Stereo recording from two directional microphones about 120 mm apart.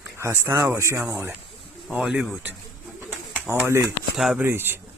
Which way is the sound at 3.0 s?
20° right (ahead or behind).